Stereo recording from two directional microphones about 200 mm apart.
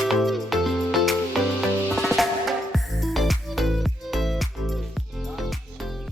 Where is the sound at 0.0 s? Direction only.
Centre (ahead or behind).